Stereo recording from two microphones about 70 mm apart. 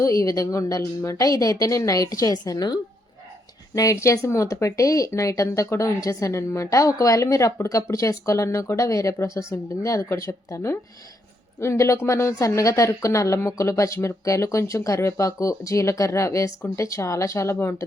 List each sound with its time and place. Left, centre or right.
0.0 s speech: left
3.8 s speech: left